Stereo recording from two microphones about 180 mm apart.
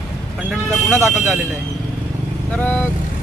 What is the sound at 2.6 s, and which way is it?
Speech, 10° left (ahead or behind).